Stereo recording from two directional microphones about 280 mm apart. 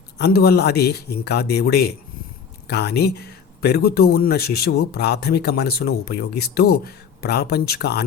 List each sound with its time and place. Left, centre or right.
0.2 s speech: left